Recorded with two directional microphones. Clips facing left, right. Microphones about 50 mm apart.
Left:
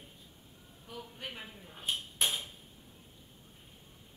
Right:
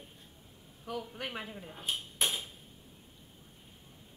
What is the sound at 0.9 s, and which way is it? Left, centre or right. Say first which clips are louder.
Speech: right 6 dB; right.